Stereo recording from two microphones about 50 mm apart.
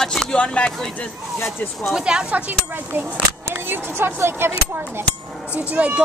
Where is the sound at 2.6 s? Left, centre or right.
Right.